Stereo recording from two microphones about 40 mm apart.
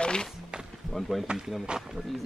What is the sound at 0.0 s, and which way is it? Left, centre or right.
Music, left.